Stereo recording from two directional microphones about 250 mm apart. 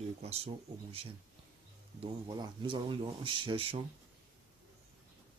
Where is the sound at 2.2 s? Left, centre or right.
Centre.